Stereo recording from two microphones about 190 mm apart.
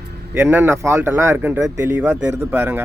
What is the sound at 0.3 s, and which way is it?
Speech, 10° right (ahead or behind).